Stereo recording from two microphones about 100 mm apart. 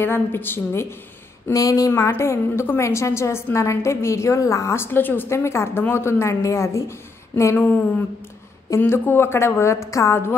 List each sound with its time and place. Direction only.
0.0 s a woman's voice: 20° left (ahead or behind)
1.5 s speech: 35° left (ahead or behind)
1.9 s a woman's voice: 25° left (ahead or behind)
7.5 s a woman's voice: 20° left (ahead or behind)